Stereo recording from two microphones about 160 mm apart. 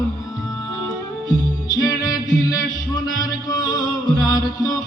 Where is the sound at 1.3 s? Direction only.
20° left (ahead or behind).